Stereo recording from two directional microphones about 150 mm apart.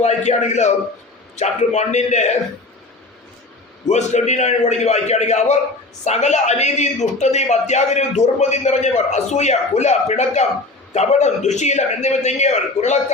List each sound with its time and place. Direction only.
0.0 s a man's voice: 50° left (ahead or behind)
3.8 s a man's voice: 50° left (ahead or behind)